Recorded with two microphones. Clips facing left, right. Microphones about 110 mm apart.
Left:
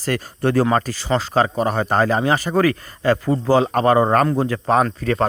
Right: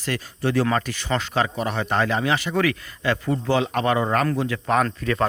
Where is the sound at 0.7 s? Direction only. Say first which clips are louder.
Left 5 dB; 35° left (ahead or behind).